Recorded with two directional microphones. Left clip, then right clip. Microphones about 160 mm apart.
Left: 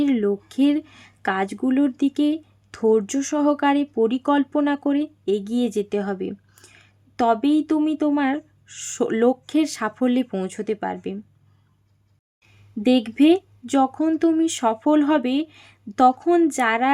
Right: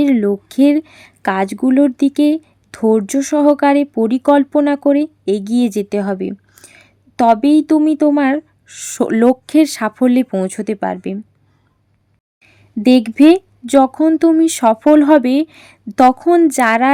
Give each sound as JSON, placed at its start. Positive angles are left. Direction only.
{"t": 0.0, "sound": "speech", "side_deg": -40}
{"t": 12.4, "sound": "speech", "side_deg": -40}